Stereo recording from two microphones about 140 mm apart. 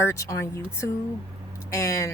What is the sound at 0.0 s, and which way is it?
Speech, 20° left (ahead or behind).